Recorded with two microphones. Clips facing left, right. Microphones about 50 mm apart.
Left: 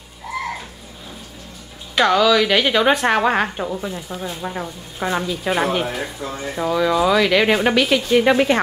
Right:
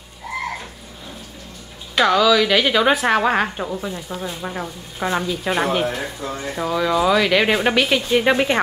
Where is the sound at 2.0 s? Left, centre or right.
Centre.